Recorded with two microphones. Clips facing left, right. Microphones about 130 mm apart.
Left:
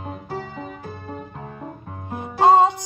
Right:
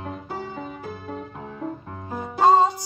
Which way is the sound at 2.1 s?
20° left (ahead or behind).